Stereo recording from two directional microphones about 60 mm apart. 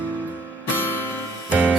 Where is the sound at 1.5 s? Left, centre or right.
Right.